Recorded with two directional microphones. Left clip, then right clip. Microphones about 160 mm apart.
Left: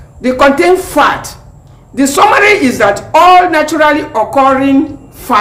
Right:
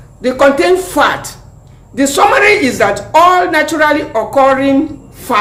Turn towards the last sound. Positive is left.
turn(degrees=30)  # may be behind; listen again after turning